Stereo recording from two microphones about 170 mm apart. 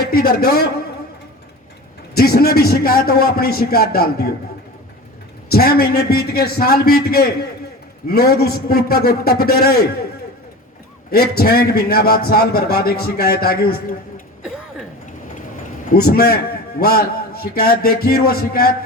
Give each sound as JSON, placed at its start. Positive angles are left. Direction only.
{"t": 0.1, "sound": "a man's voice", "side_deg": 65}
{"t": 2.1, "sound": "a man's voice", "side_deg": 65}
{"t": 5.5, "sound": "a man's voice", "side_deg": 65}
{"t": 11.1, "sound": "a man's voice", "side_deg": 65}
{"t": 15.9, "sound": "a man's voice", "side_deg": 65}